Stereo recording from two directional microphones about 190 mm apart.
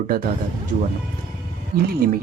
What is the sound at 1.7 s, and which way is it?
Speech, 25° right (ahead or behind).